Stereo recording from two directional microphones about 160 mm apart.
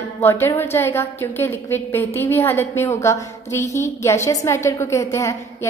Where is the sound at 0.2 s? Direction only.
15° left (ahead or behind).